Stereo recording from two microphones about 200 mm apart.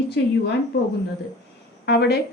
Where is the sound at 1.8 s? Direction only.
55° left (ahead or behind).